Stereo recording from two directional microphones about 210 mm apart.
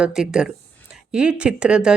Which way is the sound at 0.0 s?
5° right (ahead or behind).